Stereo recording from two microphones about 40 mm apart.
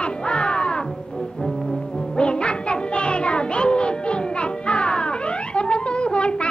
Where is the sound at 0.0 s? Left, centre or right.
Left.